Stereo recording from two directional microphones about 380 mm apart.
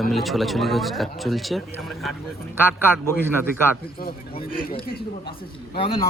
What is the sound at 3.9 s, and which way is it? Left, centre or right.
Speech, centre.